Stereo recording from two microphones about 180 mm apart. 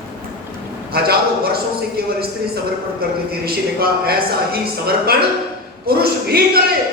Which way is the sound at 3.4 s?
60° right (ahead or behind).